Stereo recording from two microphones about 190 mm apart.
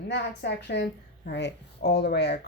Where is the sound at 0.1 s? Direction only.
65° left (ahead or behind).